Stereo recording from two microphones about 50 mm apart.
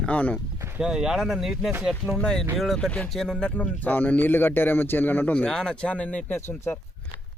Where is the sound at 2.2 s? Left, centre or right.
Centre.